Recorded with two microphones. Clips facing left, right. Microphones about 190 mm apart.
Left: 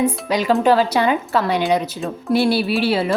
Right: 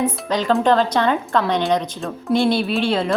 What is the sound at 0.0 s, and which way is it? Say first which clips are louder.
A woman's voice: left 2 dB; 10° left (ahead or behind).